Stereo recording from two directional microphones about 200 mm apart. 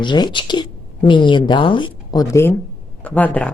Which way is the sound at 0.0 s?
20° left (ahead or behind).